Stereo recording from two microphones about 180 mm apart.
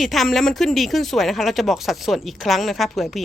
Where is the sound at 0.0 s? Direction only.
Centre (ahead or behind).